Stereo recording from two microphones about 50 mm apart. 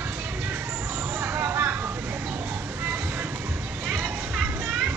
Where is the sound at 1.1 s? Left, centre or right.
Right.